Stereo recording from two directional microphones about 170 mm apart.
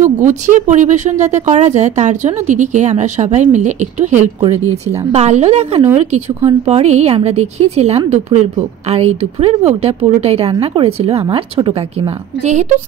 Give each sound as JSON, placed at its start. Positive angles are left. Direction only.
{"t": 0.2, "sound": "speech", "side_deg": -45}
{"t": 12.4, "sound": "speech", "side_deg": -45}